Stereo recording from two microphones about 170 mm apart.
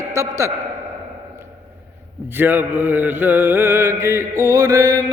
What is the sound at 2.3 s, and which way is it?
A man's voice, 10° right (ahead or behind).